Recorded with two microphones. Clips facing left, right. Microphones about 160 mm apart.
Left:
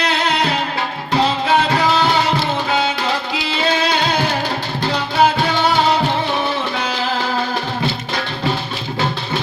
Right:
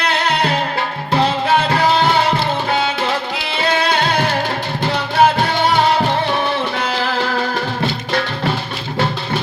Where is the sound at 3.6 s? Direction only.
55° right (ahead or behind).